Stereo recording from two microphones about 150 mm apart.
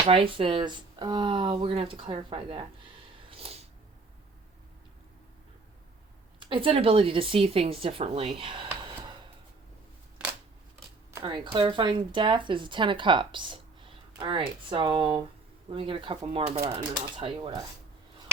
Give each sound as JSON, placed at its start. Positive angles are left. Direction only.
{"t": 0.1, "sound": "speech", "side_deg": -35}
{"t": 3.2, "sound": "a sound", "side_deg": -40}
{"t": 6.4, "sound": "speech", "side_deg": -35}
{"t": 11.2, "sound": "speech", "side_deg": -35}